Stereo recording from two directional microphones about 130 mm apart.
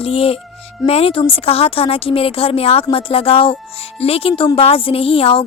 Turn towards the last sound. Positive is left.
turn(degrees=45)  # may be behind; listen again after turning